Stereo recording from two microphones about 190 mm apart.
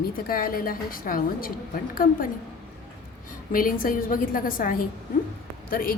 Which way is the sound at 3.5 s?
50° left (ahead or behind).